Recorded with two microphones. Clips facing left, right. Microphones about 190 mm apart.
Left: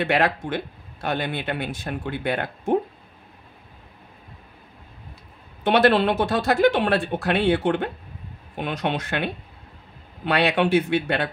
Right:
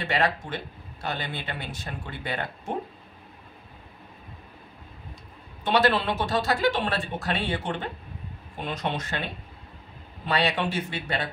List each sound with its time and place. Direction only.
0.0 s speech: 60° left (ahead or behind)
5.7 s speech: 60° left (ahead or behind)